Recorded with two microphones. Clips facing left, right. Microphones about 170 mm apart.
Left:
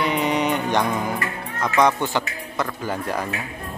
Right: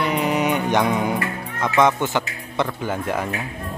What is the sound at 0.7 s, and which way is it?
Music, 20° right (ahead or behind).